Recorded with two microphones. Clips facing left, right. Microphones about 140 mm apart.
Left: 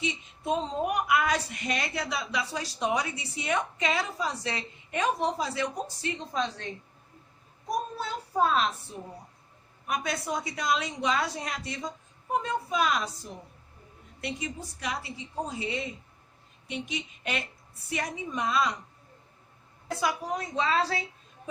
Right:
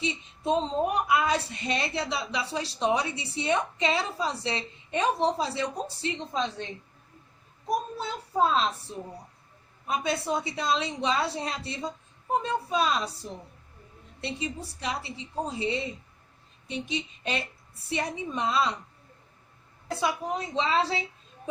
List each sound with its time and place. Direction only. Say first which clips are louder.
0.0 s a woman's voice: right 2 dB; 30° right (ahead or behind)
7.9 s a woman's voice: right 1 dB; 25° right (ahead or behind)
9.8 s a woman's voice: right 3 dB; 30° right (ahead or behind)
19.9 s a woman's voice: right 1 dB; 25° right (ahead or behind)